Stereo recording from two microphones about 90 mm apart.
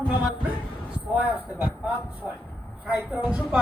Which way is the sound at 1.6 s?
15° right (ahead or behind).